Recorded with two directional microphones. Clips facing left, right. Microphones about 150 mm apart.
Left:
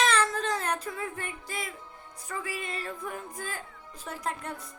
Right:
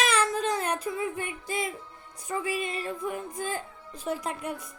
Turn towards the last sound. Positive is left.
turn(degrees=-15)  # may be behind; listen again after turning